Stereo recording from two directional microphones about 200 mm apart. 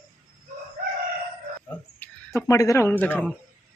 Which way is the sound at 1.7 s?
10° left (ahead or behind).